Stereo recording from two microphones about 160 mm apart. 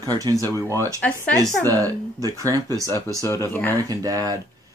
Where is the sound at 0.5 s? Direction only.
15° left (ahead or behind).